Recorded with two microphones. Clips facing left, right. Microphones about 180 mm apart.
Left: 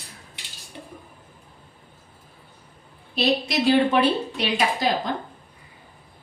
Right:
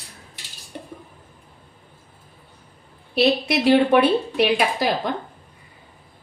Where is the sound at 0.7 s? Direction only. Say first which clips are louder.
Right 4 dB; 55° right (ahead or behind).